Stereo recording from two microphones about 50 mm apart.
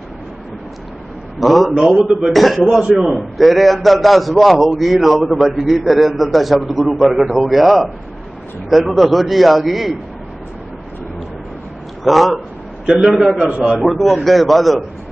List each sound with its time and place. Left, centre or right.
1.4 s a man's voice: centre
1.8 s a man's voice: centre
2.2 s a man's voice: centre
12.0 s a man's voice: centre
13.4 s a man's voice: right
13.7 s a man's voice: centre